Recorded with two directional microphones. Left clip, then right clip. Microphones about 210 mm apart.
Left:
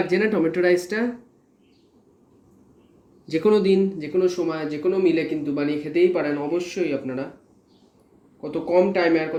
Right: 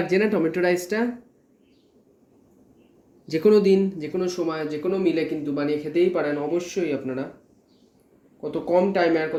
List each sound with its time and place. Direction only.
0.1 s speech: 20° right (ahead or behind)
3.2 s speech: 20° right (ahead or behind)
8.4 s speech: 30° right (ahead or behind)